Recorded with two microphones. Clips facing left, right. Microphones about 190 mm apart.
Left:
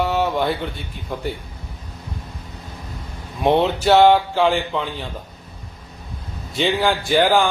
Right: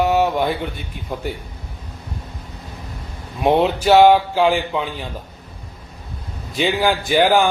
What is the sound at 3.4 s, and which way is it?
Speech, 5° right (ahead or behind).